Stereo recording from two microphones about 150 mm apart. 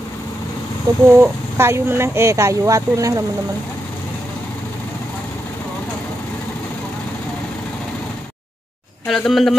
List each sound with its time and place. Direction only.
1.0 s speech: 15° right (ahead or behind)
9.0 s speech: 5° left (ahead or behind)